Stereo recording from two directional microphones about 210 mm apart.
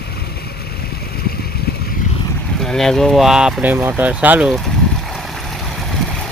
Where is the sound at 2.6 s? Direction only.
Centre (ahead or behind).